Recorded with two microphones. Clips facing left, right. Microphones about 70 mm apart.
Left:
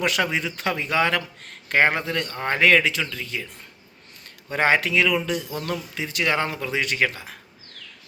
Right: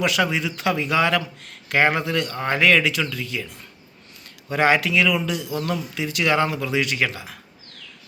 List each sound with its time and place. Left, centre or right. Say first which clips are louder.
0.0 s speech: right 2 dB; left
4.5 s speech: right 2 dB; left